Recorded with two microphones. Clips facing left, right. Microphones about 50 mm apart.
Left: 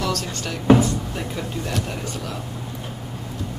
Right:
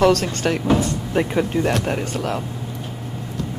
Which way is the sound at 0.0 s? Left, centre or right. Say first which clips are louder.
Right 9 dB; right.